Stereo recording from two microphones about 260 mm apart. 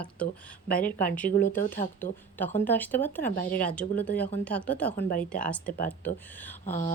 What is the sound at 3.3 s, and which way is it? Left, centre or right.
Speech, left.